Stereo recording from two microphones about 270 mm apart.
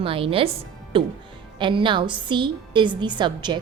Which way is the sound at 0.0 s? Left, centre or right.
Centre.